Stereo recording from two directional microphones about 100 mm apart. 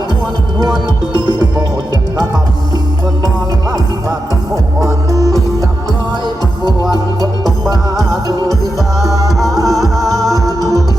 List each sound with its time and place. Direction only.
1.2 s music: 45° left (ahead or behind)
4.5 s music: 35° right (ahead or behind)
7.4 s music: 5° left (ahead or behind)
9.6 s music: centre (ahead or behind)